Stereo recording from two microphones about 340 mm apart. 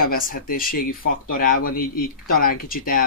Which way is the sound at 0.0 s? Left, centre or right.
Left.